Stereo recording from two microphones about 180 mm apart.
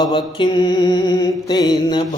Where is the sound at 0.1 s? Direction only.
25° left (ahead or behind).